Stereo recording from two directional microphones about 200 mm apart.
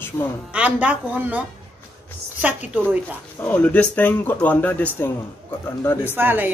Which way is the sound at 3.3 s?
10° left (ahead or behind).